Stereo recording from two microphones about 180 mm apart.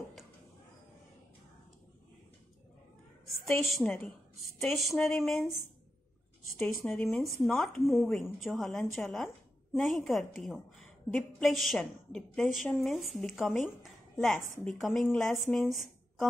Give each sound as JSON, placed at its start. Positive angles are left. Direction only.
{"t": 3.4, "sound": "a woman's voice", "side_deg": 15}
{"t": 6.8, "sound": "speech", "side_deg": 10}
{"t": 7.5, "sound": "a woman's voice", "side_deg": 0}